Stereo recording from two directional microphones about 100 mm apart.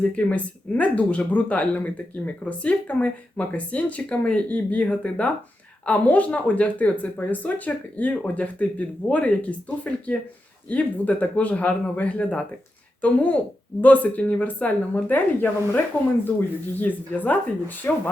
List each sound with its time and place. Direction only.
0.0 s speech: 15° left (ahead or behind)